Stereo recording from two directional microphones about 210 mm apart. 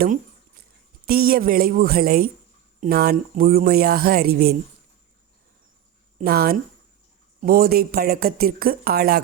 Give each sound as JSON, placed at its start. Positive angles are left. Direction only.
{"t": 1.0, "sound": "speech", "side_deg": -45}
{"t": 6.1, "sound": "speech", "side_deg": -45}